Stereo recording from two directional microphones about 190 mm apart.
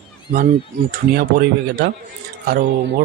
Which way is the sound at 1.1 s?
55° right (ahead or behind).